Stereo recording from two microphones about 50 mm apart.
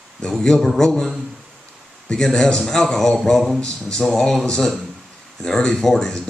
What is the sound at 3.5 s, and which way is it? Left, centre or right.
Speech, centre.